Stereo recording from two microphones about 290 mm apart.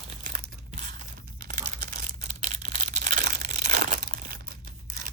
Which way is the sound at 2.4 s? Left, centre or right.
Right.